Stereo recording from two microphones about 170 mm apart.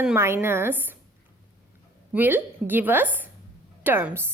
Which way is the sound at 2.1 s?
10° right (ahead or behind).